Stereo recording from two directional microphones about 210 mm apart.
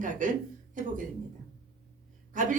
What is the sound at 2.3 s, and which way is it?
Speech, 40° right (ahead or behind).